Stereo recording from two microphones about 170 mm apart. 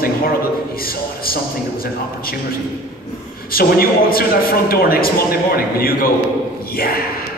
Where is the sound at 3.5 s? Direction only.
60° left (ahead or behind).